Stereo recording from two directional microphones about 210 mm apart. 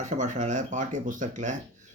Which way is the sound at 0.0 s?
35° right (ahead or behind).